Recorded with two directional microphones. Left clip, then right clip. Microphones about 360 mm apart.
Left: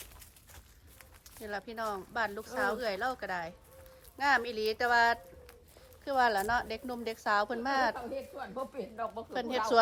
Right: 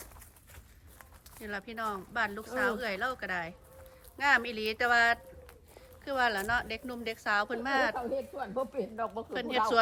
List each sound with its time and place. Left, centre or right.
1.4 s speech: centre
7.9 s speech: centre
9.3 s speech: centre